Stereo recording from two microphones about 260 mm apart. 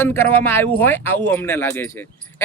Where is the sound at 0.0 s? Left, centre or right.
Centre.